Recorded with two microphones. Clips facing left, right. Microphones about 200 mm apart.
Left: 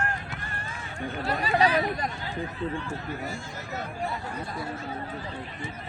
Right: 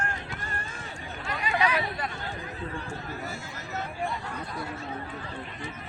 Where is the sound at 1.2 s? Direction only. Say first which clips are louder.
Left 4 dB; 35° left (ahead or behind).